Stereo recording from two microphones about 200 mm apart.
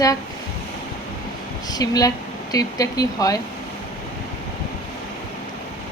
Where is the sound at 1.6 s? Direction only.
20° left (ahead or behind).